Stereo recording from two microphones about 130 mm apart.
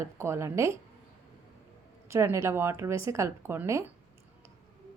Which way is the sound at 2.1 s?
20° right (ahead or behind).